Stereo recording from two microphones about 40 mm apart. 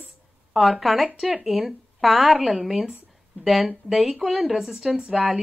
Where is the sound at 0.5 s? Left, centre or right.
Centre.